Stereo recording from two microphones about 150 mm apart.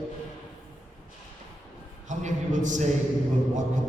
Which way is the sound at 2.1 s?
55° right (ahead or behind).